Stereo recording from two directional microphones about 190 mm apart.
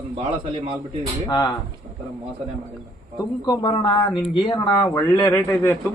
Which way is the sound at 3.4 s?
20° left (ahead or behind).